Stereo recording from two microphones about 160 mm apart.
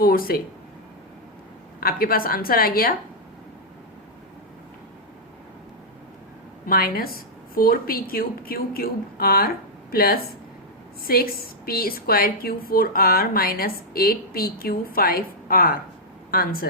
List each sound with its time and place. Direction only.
0.0 s speech: 65° left (ahead or behind)
1.8 s a woman's voice: 65° left (ahead or behind)
6.7 s a woman's voice: 65° left (ahead or behind)